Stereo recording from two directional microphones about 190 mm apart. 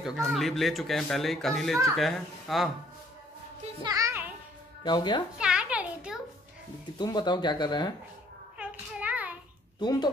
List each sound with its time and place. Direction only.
0.0 s speech: centre (ahead or behind)
3.8 s music: 15° right (ahead or behind)
4.8 s speech: 25° left (ahead or behind)
5.4 s a sound: 5° right (ahead or behind)
7.0 s speech: 20° left (ahead or behind)
8.5 s hands: 5° right (ahead or behind)
9.8 s speech: 20° left (ahead or behind)